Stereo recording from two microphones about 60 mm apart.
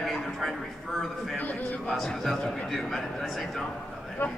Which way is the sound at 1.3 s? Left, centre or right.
Left.